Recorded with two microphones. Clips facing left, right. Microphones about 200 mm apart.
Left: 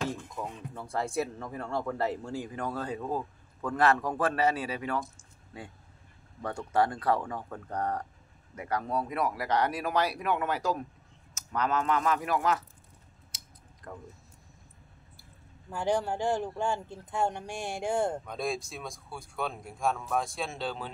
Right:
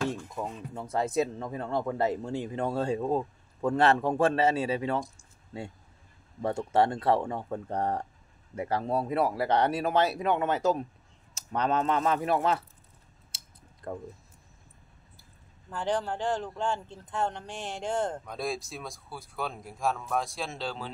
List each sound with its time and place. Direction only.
0.2 s speech: 15° right (ahead or behind)
13.8 s speech: 30° right (ahead or behind)
15.7 s speech: 10° left (ahead or behind)
18.2 s speech: centre (ahead or behind)